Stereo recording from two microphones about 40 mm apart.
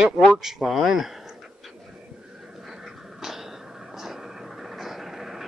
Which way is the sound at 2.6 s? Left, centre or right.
Centre.